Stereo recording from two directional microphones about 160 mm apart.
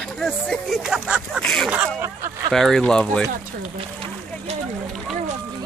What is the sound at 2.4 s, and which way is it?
Speech, 5° left (ahead or behind).